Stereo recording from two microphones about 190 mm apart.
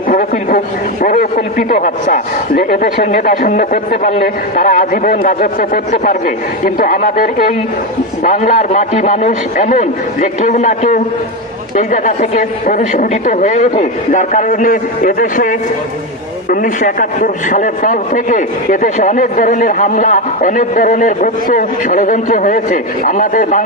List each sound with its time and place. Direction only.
1.0 s a man's voice: 45° left (ahead or behind)